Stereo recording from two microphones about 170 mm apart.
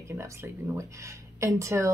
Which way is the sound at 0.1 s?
15° right (ahead or behind).